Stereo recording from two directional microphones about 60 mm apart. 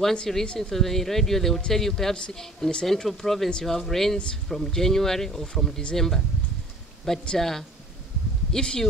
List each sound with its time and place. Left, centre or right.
0.0 s speech: centre
7.3 s speech: centre